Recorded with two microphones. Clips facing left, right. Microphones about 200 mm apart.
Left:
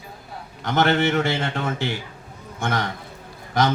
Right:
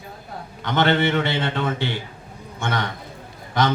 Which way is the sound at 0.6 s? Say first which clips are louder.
Even; 45° left (ahead or behind).